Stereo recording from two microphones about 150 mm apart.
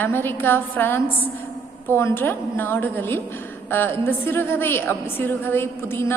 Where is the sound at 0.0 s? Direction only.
15° left (ahead or behind).